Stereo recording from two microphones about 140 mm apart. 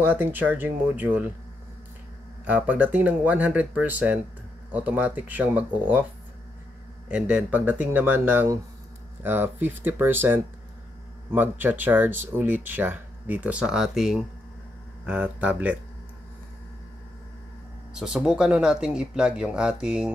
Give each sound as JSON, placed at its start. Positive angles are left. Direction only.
{"t": 0.0, "sound": "speech", "side_deg": -15}
{"t": 2.4, "sound": "speech", "side_deg": -10}
{"t": 7.1, "sound": "speech", "side_deg": -10}
{"t": 17.9, "sound": "speech", "side_deg": -5}